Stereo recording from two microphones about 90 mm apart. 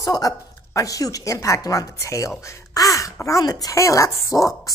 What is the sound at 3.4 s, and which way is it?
Speech, 45° left (ahead or behind).